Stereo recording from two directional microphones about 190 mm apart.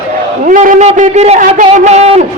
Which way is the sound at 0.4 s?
40° right (ahead or behind).